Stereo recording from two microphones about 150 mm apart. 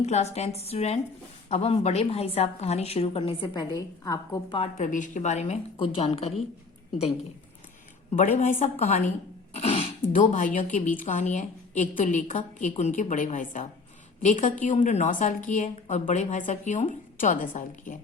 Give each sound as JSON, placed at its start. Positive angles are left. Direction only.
{"t": 0.0, "sound": "a woman's voice", "side_deg": 50}
{"t": 4.4, "sound": "speech", "side_deg": 40}
{"t": 4.8, "sound": "a woman's voice", "side_deg": 60}
{"t": 8.4, "sound": "a woman's voice", "side_deg": 45}
{"t": 9.6, "sound": "throat clearing", "side_deg": 45}
{"t": 10.1, "sound": "a woman's voice", "side_deg": 65}